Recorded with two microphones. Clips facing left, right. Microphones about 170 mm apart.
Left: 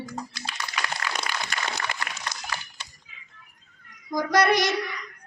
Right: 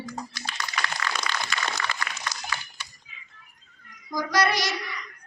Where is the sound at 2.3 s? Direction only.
55° left (ahead or behind).